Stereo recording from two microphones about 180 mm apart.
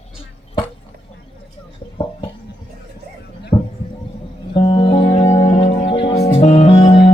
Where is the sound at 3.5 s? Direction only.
25° left (ahead or behind).